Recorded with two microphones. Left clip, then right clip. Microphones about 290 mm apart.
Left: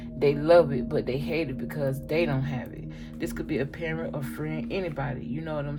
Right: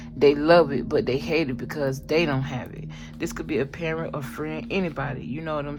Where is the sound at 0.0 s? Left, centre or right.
Right.